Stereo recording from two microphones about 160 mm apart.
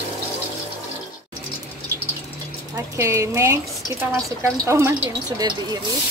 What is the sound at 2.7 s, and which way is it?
A woman's voice, 20° right (ahead or behind).